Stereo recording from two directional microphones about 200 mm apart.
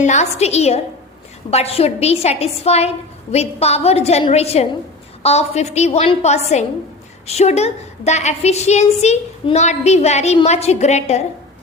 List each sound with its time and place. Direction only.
0.0 s a woman's voice: 35° left (ahead or behind)